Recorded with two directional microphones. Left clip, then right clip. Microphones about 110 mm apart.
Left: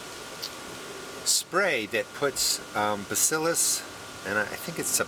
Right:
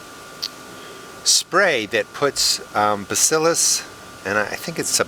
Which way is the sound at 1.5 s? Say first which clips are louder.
Right 6 dB; 45° right (ahead or behind).